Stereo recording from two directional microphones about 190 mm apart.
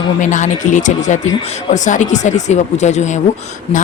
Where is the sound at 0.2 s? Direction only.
40° left (ahead or behind).